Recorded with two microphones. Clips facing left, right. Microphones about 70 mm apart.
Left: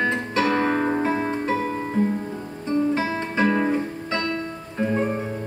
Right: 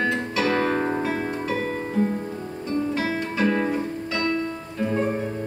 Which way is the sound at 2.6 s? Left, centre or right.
Left.